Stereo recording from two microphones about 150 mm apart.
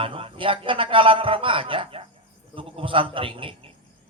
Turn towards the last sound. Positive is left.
turn(degrees=-35)  # may be behind; listen again after turning